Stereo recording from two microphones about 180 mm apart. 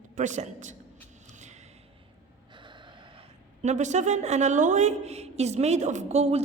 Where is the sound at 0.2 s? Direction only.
40° right (ahead or behind).